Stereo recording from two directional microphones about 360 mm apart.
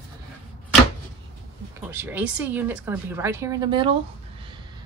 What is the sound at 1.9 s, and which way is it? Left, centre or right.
Speech, centre.